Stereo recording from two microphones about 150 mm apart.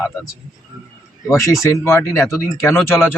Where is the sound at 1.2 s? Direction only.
20° left (ahead or behind).